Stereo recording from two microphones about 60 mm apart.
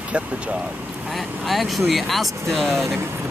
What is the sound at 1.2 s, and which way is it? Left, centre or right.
Speech, centre.